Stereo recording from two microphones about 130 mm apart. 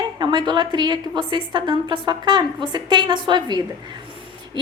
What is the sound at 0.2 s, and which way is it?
A woman's voice, 35° right (ahead or behind).